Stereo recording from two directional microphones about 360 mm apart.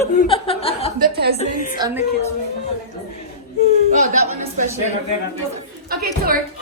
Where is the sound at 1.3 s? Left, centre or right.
Left.